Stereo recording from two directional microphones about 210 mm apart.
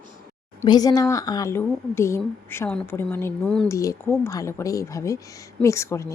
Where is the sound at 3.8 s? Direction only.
15° left (ahead or behind).